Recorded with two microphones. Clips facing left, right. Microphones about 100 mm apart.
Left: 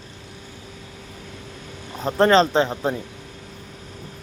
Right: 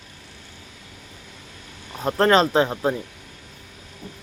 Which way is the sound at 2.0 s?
5° right (ahead or behind).